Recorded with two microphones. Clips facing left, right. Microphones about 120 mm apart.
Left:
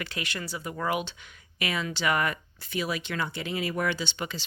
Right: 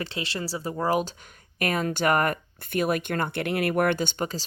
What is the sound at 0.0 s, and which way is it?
Speech, 30° right (ahead or behind).